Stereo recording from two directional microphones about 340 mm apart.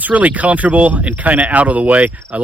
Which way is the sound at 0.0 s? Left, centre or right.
Centre.